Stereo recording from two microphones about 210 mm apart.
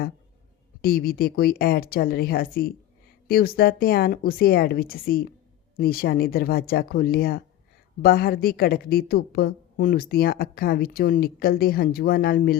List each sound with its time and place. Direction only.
0.8 s a woman's voice: 45° left (ahead or behind)